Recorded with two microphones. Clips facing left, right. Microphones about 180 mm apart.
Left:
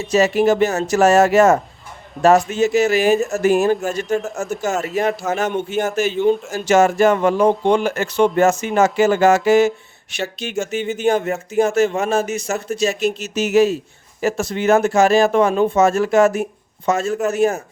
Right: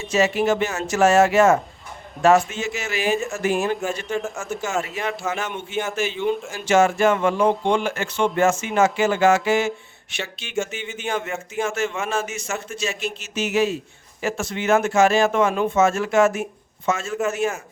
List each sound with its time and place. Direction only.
0.0 s speech: 40° left (ahead or behind)